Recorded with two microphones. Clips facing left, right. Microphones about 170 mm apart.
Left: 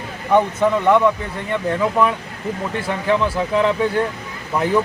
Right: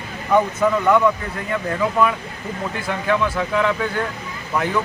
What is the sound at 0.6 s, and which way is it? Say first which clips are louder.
Speech: left 1 dB; 25° left (ahead or behind).